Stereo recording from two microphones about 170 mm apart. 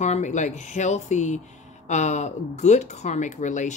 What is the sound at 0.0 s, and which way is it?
Speech, 45° left (ahead or behind).